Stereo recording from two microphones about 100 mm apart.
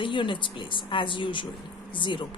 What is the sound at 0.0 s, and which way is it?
Speech, 55° left (ahead or behind).